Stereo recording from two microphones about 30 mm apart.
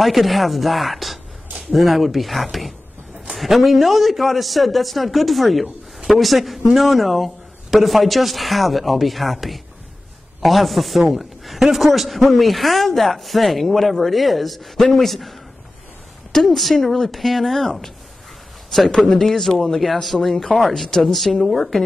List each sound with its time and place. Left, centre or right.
0.0 s a man's voice: centre
16.4 s speech: centre
18.9 s a man's voice: centre
19.5 s speech: centre
19.8 s a man's voice: centre